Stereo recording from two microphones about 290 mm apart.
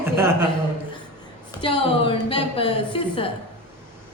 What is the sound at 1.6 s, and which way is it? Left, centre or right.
A woman's voice, centre.